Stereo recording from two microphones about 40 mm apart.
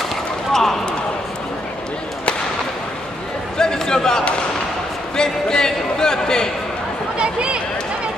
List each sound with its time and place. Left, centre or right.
0.5 s basketball bounce: centre
3.5 s a sound: centre
5.1 s speech: centre